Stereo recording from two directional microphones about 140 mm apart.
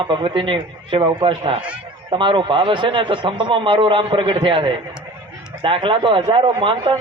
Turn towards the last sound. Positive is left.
turn(degrees=-35)  # may be behind; listen again after turning